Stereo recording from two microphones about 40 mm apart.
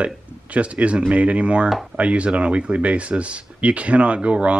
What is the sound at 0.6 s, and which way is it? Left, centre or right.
Speech, right.